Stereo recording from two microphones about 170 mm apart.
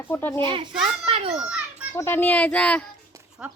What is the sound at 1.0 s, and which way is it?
Children playing, 35° right (ahead or behind).